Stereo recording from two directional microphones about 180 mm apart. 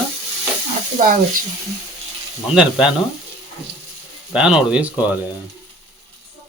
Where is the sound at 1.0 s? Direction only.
45° right (ahead or behind).